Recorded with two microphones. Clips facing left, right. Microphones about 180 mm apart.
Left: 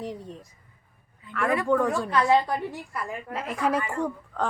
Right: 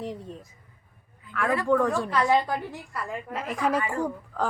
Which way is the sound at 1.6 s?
Centre (ahead or behind).